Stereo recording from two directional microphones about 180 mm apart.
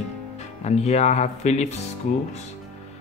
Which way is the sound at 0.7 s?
40° left (ahead or behind).